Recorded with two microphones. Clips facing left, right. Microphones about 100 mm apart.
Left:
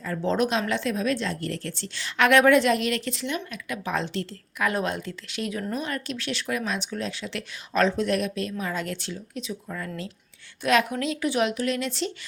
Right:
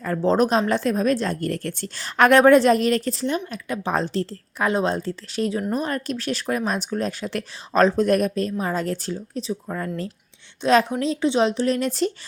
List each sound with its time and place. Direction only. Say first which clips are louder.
0.0 s a woman's voice: right 5 dB; 40° right (ahead or behind)
10.6 s a woman's voice: right 4 dB; 30° right (ahead or behind)